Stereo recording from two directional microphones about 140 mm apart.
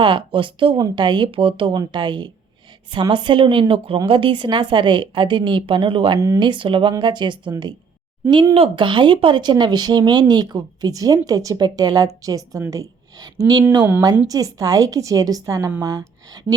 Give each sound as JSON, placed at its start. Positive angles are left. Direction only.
{"t": 0.0, "sound": "a woman's voice", "side_deg": -35}
{"t": 6.1, "sound": "a woman's voice", "side_deg": -25}